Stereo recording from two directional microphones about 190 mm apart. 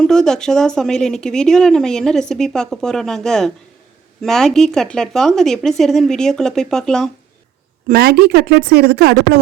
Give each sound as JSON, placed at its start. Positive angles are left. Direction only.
{"t": 0.0, "sound": "a woman's voice", "side_deg": 5}
{"t": 7.9, "sound": "speech", "side_deg": -55}